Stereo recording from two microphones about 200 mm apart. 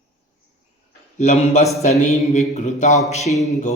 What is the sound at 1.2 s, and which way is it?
A man's voice, 35° left (ahead or behind).